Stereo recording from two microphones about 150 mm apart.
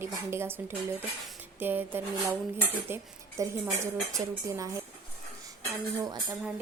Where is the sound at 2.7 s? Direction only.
15° right (ahead or behind).